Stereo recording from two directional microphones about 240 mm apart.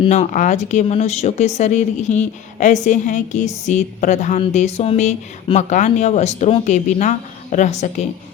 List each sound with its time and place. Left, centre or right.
0.0 s speech: left